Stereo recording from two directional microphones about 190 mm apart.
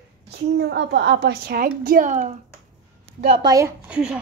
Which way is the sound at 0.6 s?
65° right (ahead or behind).